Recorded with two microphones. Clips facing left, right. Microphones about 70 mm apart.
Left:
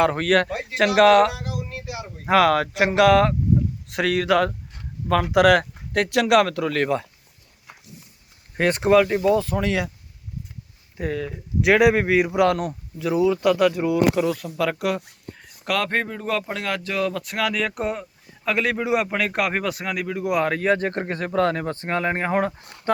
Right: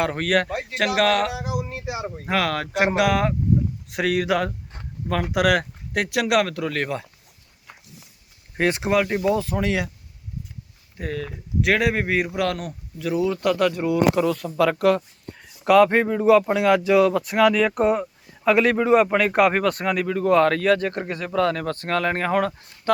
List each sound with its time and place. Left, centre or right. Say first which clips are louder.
0.0 s speech: left 3 dB; centre
1.5 s a sound: right 3 dB; centre
2.2 s speech: left 7 dB; centre
8.5 s speech: left 4 dB; centre
10.9 s speech: left 3 dB; centre
20.7 s speech: right 1 dB; left